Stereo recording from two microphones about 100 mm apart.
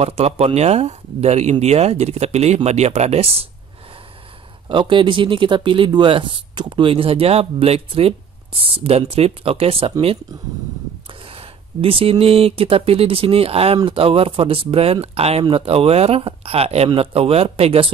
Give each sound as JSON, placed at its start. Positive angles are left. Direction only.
{"t": 0.0, "sound": "speech", "side_deg": -90}
{"t": 4.6, "sound": "speech", "side_deg": -55}
{"t": 11.2, "sound": "speech", "side_deg": -65}
{"t": 15.4, "sound": "speech", "side_deg": -65}